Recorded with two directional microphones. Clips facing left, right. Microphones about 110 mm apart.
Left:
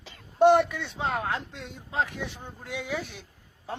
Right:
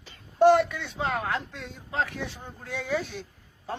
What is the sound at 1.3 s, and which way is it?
A man's voice, 20° left (ahead or behind).